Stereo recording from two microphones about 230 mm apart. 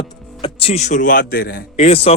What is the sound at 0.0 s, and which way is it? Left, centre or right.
A man's voice, left.